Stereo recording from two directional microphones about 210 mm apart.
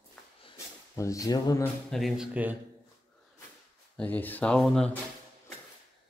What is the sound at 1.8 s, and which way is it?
Speech, centre (ahead or behind).